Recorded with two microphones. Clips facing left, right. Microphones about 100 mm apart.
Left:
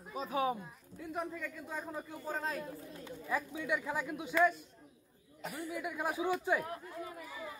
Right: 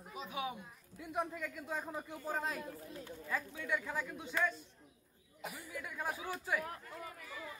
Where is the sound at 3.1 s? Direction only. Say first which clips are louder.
Left 4 dB; 15° left (ahead or behind).